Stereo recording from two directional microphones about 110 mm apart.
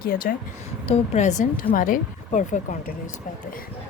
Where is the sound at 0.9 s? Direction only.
90° left.